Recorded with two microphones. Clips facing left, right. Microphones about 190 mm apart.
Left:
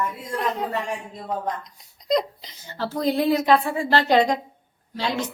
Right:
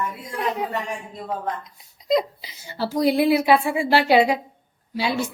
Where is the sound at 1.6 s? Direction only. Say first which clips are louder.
Right 1 dB; 5° right (ahead or behind).